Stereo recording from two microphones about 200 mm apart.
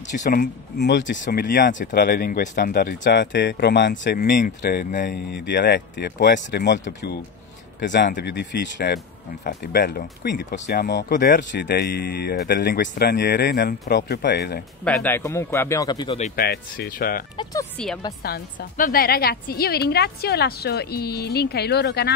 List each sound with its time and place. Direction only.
0.2 s speech: 45° left (ahead or behind); by 1.2 s 65° left (ahead or behind)
1.2 s a woman's voice: 45° left (ahead or behind)
14.9 s speech: 10° left (ahead or behind)
16.3 s a woman's voice: 50° left (ahead or behind)
17.4 s speech: 15° left (ahead or behind)
18.2 s a woman's voice: 50° left (ahead or behind)